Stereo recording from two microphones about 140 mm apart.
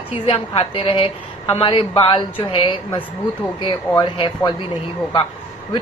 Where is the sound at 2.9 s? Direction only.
10° left (ahead or behind).